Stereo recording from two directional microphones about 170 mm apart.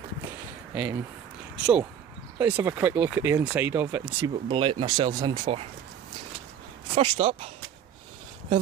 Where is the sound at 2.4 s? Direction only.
15° right (ahead or behind).